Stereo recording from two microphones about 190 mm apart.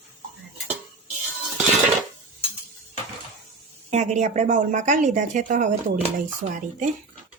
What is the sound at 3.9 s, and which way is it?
A woman's voice, 40° right (ahead or behind).